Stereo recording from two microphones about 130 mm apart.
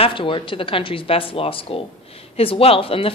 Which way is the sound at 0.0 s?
40° left (ahead or behind).